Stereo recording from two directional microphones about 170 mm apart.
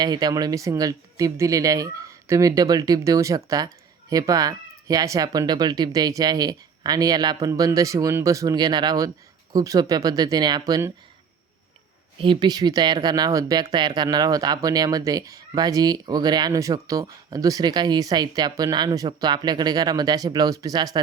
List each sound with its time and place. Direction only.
0.0 s speech: 25° right (ahead or behind)
12.2 s speech: 25° right (ahead or behind)